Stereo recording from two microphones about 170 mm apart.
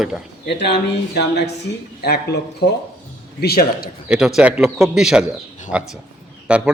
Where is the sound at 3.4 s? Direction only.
65° left (ahead or behind).